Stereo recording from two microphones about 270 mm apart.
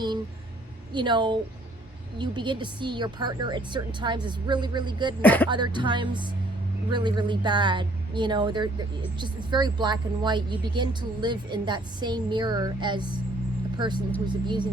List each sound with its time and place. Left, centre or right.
0.9 s speech: centre
5.2 s speech: centre
5.5 s speech: centre